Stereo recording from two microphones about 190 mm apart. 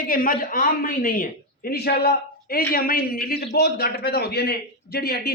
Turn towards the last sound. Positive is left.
turn(degrees=55)  # may be behind; listen again after turning